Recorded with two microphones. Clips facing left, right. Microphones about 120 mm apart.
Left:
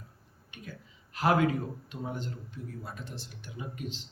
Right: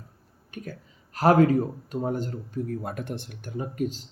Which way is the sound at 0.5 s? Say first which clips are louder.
Right 8 dB; 45° right (ahead or behind).